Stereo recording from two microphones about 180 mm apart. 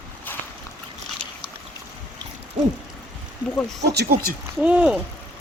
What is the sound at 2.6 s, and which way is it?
Hoot, 35° right (ahead or behind).